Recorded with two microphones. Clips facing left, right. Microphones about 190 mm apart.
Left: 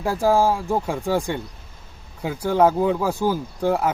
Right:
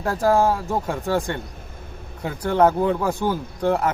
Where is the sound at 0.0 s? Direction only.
10° left (ahead or behind).